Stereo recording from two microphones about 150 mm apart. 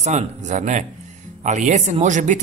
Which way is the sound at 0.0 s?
55° right (ahead or behind).